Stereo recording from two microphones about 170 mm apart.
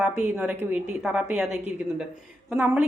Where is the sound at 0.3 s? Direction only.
15° right (ahead or behind).